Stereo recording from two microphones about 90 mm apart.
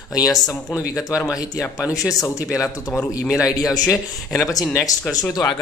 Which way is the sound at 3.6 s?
40° left (ahead or behind).